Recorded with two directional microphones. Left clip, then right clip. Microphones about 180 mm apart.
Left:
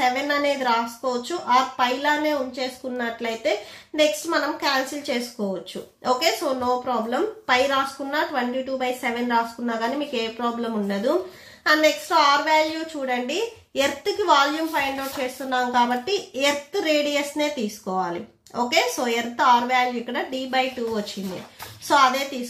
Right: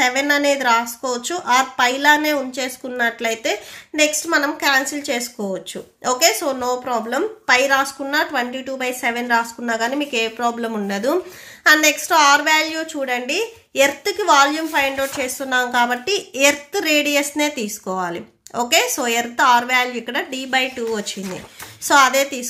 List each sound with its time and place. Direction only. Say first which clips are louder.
0.0 s a woman's voice: right 5 dB; 40° right (ahead or behind)